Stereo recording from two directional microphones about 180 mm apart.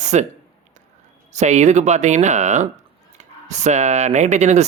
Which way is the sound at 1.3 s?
40° right (ahead or behind).